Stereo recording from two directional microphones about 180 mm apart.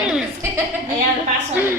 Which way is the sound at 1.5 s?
15° right (ahead or behind).